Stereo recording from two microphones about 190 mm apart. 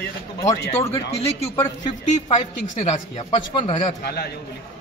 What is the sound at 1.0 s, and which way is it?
Speech, 30° left (ahead or behind).